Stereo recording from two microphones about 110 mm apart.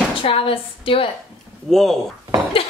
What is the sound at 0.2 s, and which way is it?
Speech, 55° left (ahead or behind).